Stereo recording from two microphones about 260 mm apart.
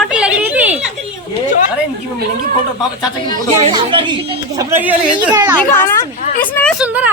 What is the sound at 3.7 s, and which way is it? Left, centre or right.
A child's voice, centre.